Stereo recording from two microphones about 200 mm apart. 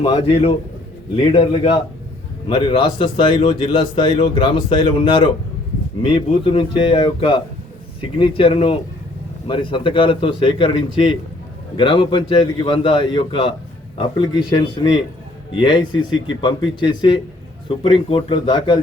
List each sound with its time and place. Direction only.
0.0 s speech: 25° left (ahead or behind)
16.1 s speech: 70° left (ahead or behind)
16.8 s speech: 20° left (ahead or behind)